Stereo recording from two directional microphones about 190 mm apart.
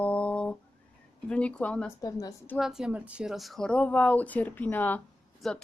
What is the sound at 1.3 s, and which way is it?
Speech, 5° left (ahead or behind).